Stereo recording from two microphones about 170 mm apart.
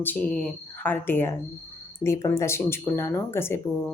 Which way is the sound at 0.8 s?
10° left (ahead or behind).